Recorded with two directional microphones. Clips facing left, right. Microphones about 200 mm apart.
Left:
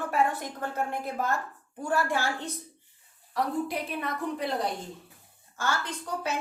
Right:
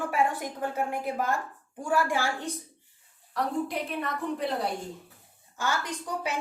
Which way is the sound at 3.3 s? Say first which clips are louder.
Even; centre (ahead or behind).